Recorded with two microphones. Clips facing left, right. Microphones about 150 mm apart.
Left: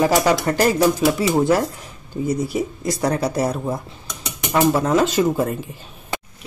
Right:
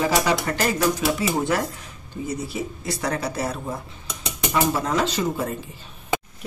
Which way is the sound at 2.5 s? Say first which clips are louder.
Left 6 dB; 40° left (ahead or behind).